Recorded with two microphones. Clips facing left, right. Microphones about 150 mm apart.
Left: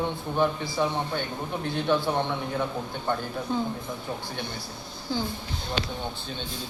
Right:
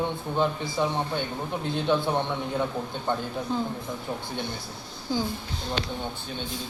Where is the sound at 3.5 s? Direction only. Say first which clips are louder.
Left 1 dB; centre (ahead or behind).